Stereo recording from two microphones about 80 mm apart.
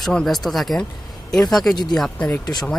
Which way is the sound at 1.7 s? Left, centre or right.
Left.